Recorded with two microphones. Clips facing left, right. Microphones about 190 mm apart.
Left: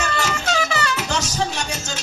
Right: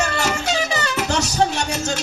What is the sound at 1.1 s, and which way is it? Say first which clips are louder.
Music: right 4 dB; 65° right (ahead or behind).